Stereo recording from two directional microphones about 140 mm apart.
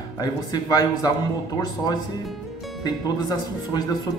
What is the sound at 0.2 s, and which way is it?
Speech, 30° left (ahead or behind).